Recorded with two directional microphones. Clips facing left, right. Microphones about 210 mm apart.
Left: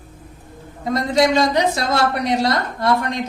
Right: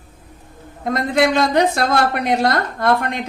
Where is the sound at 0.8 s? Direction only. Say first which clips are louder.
Even; 55° right (ahead or behind).